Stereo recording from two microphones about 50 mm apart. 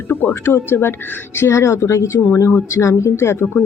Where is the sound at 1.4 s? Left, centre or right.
Left.